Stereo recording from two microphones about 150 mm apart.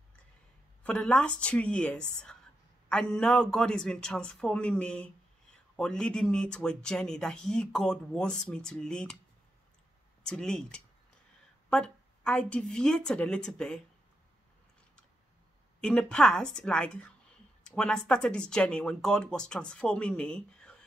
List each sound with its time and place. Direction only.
0.8 s a woman's voice: 5° left (ahead or behind)
10.2 s speech: 5° left (ahead or behind)
15.8 s speech: 5° left (ahead or behind)